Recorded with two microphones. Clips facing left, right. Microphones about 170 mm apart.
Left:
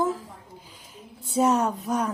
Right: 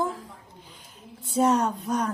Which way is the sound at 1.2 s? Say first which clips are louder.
Even; 5° left (ahead or behind).